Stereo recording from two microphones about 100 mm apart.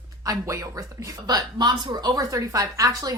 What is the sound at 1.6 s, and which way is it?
A woman's voice, 45° right (ahead or behind).